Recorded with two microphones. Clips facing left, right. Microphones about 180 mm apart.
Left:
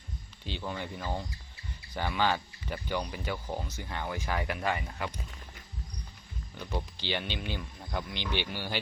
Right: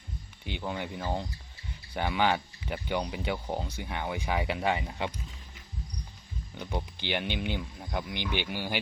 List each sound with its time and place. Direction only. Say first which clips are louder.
0.4 s speech: right 2 dB; 15° right (ahead or behind)
6.6 s speech: right 1 dB; 15° right (ahead or behind)